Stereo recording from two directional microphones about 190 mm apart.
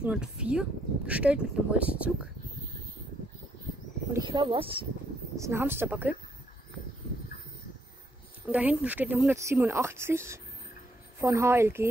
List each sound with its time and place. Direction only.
0.0 s speech: 5° right (ahead or behind)
4.2 s speech: 25° right (ahead or behind)
5.4 s speech: 10° right (ahead or behind)
8.5 s speech: 10° right (ahead or behind)